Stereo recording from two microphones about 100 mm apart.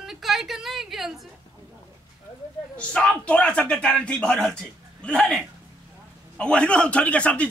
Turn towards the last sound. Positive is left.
turn(degrees=10)  # may be behind; listen again after turning